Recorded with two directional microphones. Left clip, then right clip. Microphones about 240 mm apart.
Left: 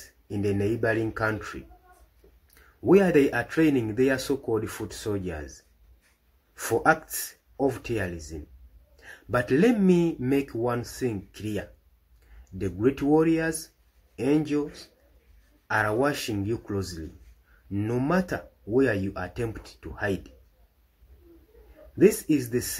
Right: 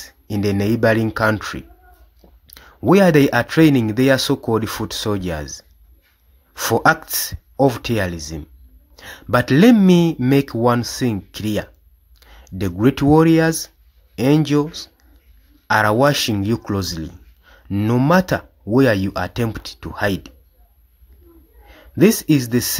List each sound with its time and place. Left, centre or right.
0.0 s speech: right
21.9 s speech: right